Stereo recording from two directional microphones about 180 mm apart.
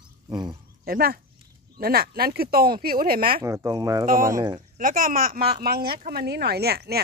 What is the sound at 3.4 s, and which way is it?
Speech, 15° right (ahead or behind).